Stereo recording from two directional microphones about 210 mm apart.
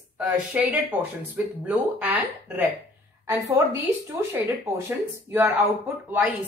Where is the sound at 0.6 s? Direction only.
5° right (ahead or behind).